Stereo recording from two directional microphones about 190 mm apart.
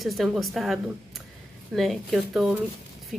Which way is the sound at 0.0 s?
Centre (ahead or behind).